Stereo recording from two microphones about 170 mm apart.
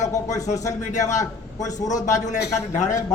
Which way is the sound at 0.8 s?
45° left (ahead or behind).